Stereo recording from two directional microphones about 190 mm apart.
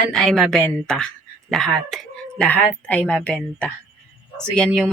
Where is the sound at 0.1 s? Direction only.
5° left (ahead or behind).